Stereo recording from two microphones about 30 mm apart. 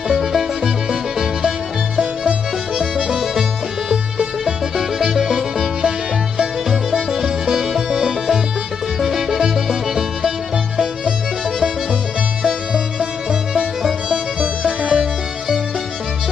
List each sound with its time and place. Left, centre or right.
0.1 s music: centre
4.7 s music: centre
12.4 s music: right
14.1 s music: right